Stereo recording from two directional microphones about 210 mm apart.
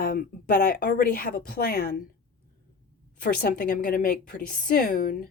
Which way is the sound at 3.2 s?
40° left (ahead or behind).